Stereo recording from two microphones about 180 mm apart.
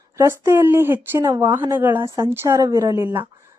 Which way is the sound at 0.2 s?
15° right (ahead or behind).